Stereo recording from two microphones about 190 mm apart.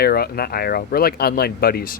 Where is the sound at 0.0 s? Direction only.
55° left (ahead or behind).